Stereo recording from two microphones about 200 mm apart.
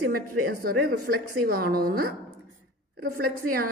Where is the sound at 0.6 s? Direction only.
50° right (ahead or behind).